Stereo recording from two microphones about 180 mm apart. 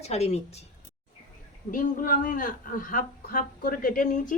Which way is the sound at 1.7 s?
45° left (ahead or behind).